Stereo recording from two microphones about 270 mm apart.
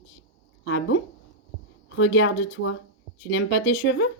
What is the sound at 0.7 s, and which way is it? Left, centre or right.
Speech, left.